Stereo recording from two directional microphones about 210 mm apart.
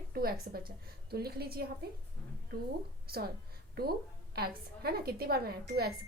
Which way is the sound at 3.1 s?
45° right (ahead or behind).